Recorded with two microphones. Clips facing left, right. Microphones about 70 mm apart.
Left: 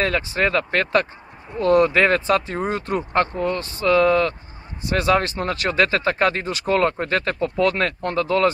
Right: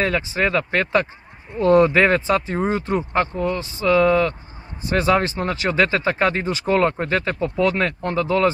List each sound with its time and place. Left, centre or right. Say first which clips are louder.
0.0 s speech: even; centre